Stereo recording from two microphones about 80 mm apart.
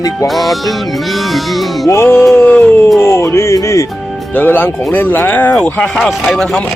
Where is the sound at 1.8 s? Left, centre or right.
Left.